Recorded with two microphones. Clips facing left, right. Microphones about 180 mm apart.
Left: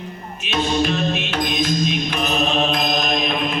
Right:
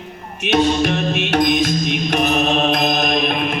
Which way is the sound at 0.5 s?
60° right (ahead or behind).